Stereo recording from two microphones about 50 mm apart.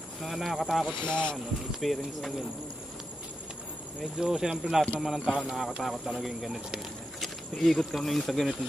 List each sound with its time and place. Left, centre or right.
0.2 s speech: centre
1.0 s speech: centre
1.8 s speech: centre
4.0 s speech: centre
7.2 s speech: centre